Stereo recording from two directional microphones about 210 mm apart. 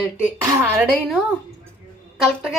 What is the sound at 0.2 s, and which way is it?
Speech, 10° right (ahead or behind).